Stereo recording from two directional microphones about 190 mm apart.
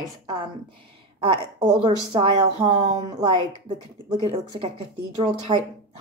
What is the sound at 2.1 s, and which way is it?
Speech, 25° right (ahead or behind).